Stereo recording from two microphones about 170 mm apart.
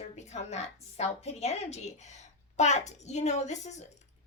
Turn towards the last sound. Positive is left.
turn(degrees=40)  # may be behind; listen again after turning